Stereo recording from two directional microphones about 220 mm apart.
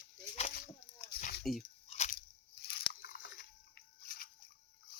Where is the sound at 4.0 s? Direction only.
40° left (ahead or behind).